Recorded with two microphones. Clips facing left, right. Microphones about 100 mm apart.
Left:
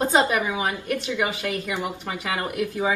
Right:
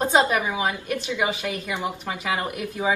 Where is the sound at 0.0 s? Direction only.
20° right (ahead or behind).